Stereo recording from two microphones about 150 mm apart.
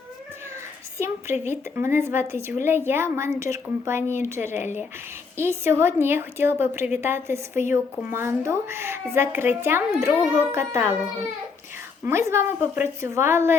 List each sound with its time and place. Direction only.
0.9 s a woman's voice: 15° right (ahead or behind)
12.0 s a woman's voice: 15° right (ahead or behind)